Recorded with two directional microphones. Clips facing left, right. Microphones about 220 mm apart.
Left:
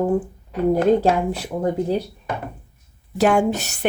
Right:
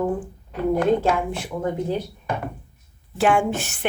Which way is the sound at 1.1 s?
35° left (ahead or behind).